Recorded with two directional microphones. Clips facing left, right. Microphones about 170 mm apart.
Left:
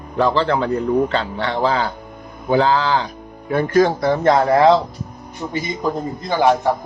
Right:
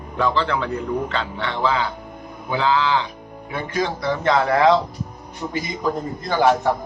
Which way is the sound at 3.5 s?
50° left (ahead or behind).